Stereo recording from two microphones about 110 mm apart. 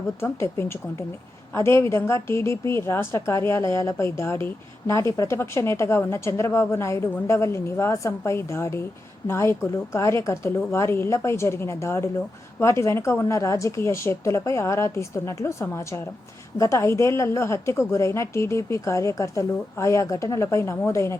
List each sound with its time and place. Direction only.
0.2 s a woman's voice: 25° left (ahead or behind)